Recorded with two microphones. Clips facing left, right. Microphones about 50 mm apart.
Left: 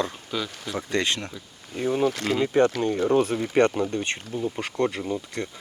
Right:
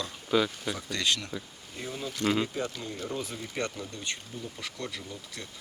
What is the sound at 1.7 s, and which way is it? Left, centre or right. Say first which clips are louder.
Speech: left 13 dB; left.